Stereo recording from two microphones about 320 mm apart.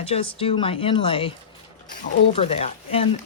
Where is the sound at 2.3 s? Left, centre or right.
Centre.